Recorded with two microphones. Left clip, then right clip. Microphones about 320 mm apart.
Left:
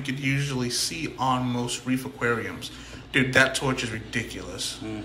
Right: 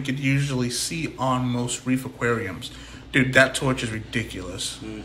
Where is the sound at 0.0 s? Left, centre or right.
Centre.